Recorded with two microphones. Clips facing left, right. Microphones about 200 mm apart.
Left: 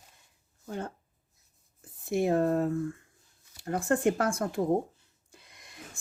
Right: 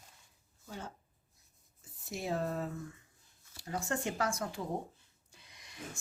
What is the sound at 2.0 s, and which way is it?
A woman's voice, 55° left (ahead or behind).